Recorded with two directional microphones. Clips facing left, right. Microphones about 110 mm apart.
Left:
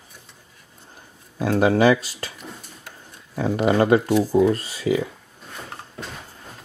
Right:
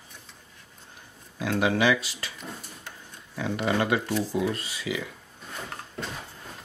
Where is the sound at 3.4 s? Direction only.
40° left (ahead or behind).